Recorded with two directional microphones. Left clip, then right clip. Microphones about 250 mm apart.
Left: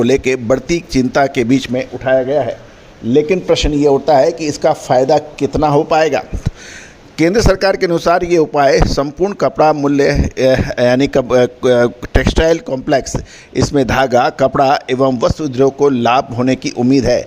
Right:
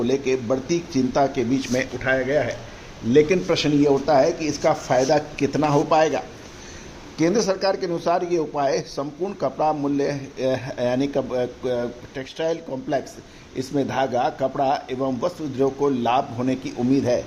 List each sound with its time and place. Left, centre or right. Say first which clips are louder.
0.0 s a man's voice: left 9 dB; left
1.7 s speech: left 6 dB; left
5.9 s a man's voice: left 6 dB; left